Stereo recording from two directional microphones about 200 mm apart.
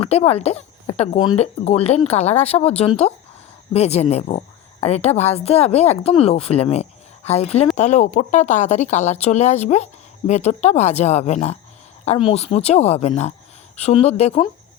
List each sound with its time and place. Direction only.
0.0 s speech: 30° left (ahead or behind)